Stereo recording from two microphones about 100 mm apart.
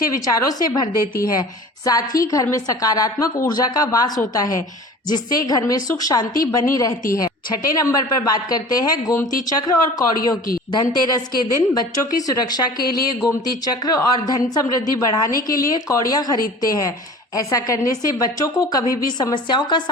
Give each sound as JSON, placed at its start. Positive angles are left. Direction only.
{"t": 0.3, "sound": "speech", "side_deg": 35}